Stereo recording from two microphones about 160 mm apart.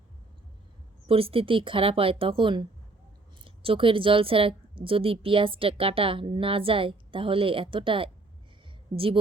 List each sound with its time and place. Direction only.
1.0 s a woman's voice: 35° right (ahead or behind)